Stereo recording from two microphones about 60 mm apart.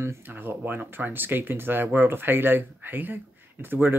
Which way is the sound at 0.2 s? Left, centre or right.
Right.